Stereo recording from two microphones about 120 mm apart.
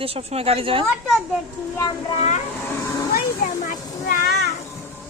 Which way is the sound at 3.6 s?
90° left.